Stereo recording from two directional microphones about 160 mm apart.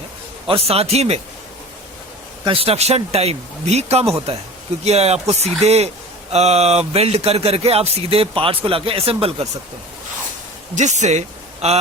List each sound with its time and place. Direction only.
0.4 s speech: 35° right (ahead or behind)
2.4 s speech: 35° right (ahead or behind)
10.8 s speech: 45° right (ahead or behind)